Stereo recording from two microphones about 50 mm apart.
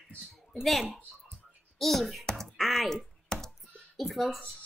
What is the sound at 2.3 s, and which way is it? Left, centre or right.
Typing, centre.